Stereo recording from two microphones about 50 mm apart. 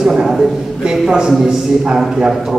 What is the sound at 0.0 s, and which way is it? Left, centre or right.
A man's voice, centre.